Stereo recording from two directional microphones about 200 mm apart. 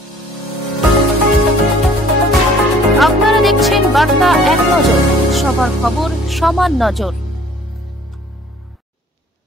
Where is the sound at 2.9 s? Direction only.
Centre (ahead or behind).